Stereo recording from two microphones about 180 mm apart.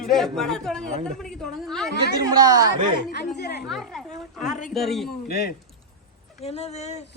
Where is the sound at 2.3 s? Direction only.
20° right (ahead or behind).